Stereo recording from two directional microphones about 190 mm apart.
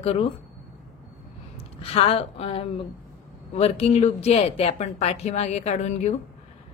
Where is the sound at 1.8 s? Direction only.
30° left (ahead or behind).